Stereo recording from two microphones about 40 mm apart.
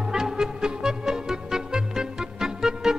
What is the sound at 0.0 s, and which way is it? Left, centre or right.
Music, centre.